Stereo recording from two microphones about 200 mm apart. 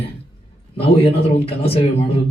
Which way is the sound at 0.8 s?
30° left (ahead or behind).